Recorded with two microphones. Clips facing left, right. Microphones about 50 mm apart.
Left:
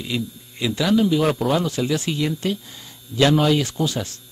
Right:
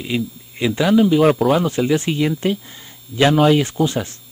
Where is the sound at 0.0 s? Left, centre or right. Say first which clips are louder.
Right 4 dB; right.